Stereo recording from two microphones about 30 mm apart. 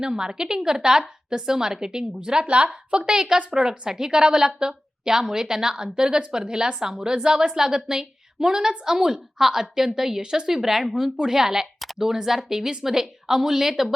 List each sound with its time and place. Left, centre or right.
0.0 s a woman's voice: right
3.2 s a woman's voice: right
10.2 s a woman's voice: right
10.5 s a woman's voice: centre